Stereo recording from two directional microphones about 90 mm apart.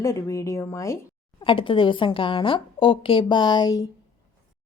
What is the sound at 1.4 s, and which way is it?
A woman's voice, 65° left (ahead or behind).